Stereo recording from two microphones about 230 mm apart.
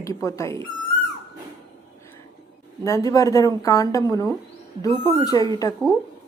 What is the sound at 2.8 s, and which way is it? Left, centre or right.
Speech, centre.